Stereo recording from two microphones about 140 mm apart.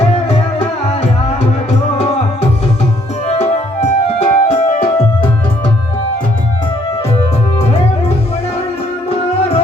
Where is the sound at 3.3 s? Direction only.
50° left (ahead or behind).